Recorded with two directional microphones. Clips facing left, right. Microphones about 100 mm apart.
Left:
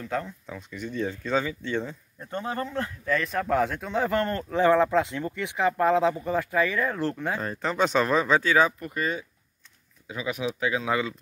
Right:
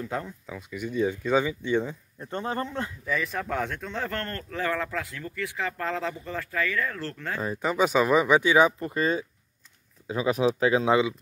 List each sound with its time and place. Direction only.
0.0 s speech: 15° right (ahead or behind)
2.3 s speech: 25° right (ahead or behind)
3.1 s speech: centre (ahead or behind); by 7.4 s 15° left (ahead or behind)
7.4 s speech: 10° right (ahead or behind); by 11.0 s 35° right (ahead or behind)